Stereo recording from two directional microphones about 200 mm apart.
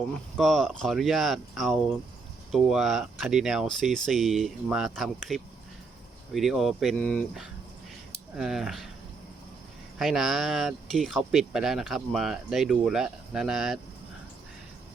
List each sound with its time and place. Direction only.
0.1 s speech: centre (ahead or behind)
10.0 s speech: centre (ahead or behind)